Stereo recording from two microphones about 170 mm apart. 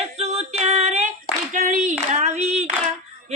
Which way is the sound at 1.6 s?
45° right (ahead or behind).